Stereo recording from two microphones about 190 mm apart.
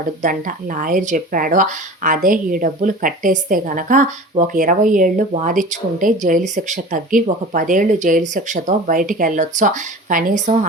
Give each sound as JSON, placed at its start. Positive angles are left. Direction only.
{"t": 0.2, "sound": "a woman's voice", "side_deg": -45}